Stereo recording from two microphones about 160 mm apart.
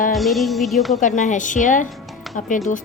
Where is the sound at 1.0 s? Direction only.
50° left (ahead or behind).